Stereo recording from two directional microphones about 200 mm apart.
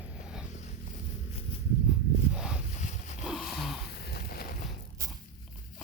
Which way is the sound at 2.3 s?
5° right (ahead or behind).